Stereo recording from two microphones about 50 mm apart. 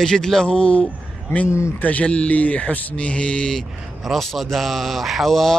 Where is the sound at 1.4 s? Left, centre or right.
Left.